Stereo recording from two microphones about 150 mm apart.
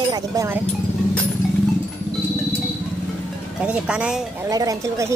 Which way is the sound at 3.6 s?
5° right (ahead or behind).